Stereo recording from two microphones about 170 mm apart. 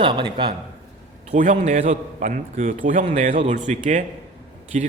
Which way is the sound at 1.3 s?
45° right (ahead or behind).